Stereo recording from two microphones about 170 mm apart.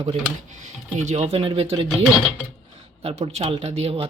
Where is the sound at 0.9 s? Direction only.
40° right (ahead or behind).